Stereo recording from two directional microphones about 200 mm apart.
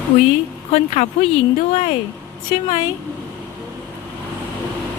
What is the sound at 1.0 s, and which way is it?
Speech, 35° left (ahead or behind).